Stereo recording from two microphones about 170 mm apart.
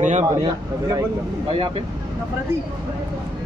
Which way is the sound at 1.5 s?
30° right (ahead or behind).